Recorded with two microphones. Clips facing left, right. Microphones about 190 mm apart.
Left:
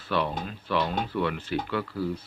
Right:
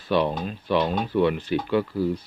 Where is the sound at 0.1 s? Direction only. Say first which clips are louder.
Right 5 dB; 20° right (ahead or behind).